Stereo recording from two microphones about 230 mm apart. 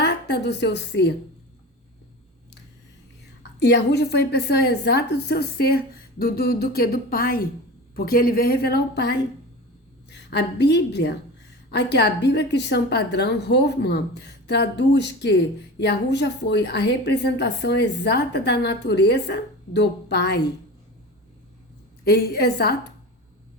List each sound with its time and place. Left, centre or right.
0.0 s a woman's voice: left
3.6 s a woman's voice: left
22.0 s a woman's voice: left